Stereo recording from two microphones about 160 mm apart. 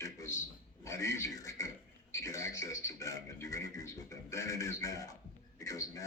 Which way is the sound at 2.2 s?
20° left (ahead or behind).